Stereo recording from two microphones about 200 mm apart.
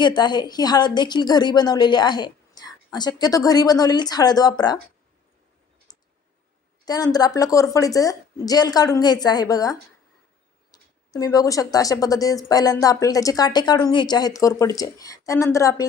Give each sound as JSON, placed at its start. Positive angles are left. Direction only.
{"t": 0.0, "sound": "a woman's voice", "side_deg": 20}
{"t": 6.8, "sound": "a woman's voice", "side_deg": 20}